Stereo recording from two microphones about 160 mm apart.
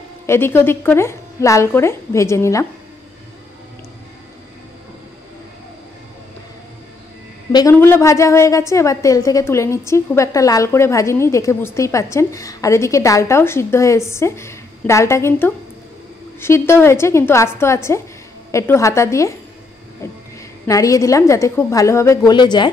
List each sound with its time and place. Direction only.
0.3 s a woman's voice: 15° left (ahead or behind)
7.5 s a woman's voice: 20° left (ahead or behind)
20.6 s a woman's voice: 20° left (ahead or behind)